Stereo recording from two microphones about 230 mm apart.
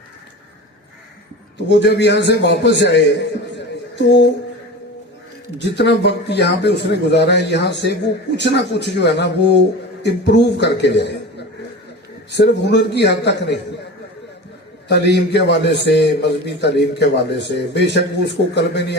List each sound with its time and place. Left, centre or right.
1.6 s a man's voice: left
3.5 s a sound: left
5.5 s a man's voice: left
14.8 s a man's voice: left